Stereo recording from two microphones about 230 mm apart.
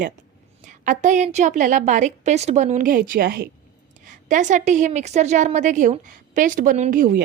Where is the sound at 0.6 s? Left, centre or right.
Right.